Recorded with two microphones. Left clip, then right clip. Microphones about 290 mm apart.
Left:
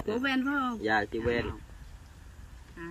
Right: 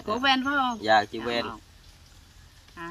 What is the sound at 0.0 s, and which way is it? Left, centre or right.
Speech, centre.